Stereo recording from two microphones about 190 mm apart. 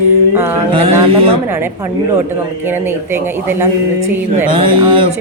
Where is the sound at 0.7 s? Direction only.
30° right (ahead or behind).